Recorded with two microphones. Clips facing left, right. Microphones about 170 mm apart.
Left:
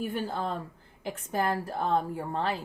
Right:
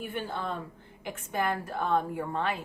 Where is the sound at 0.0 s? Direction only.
40° left (ahead or behind).